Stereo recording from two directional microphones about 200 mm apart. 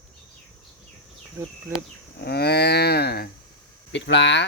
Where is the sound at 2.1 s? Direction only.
55° left (ahead or behind).